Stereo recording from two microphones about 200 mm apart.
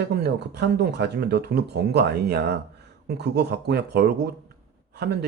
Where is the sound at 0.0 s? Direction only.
55° right (ahead or behind).